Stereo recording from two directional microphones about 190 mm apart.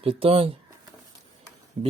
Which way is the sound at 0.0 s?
30° right (ahead or behind).